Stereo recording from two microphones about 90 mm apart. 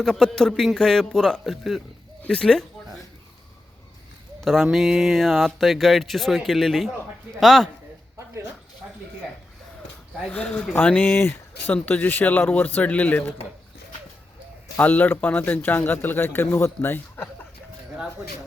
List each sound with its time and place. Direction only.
0.0 s speech: 5° left (ahead or behind)
4.4 s speech: centre (ahead or behind)
10.2 s a man's voice: 15° left (ahead or behind)
14.8 s a man's voice: 20° left (ahead or behind)